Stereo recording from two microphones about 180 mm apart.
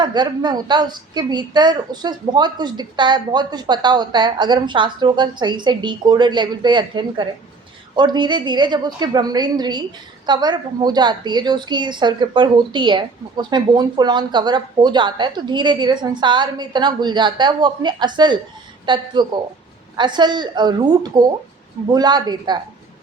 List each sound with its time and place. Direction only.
0.0 s a woman's voice: 25° right (ahead or behind)